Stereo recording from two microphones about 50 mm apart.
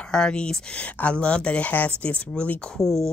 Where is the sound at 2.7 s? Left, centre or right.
Centre.